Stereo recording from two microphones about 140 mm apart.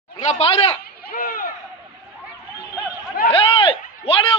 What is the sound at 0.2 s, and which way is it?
Speech, 50° left (ahead or behind).